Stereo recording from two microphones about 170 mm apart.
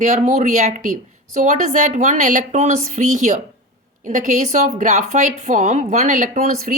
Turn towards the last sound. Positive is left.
turn(degrees=-50)  # may be behind; listen again after turning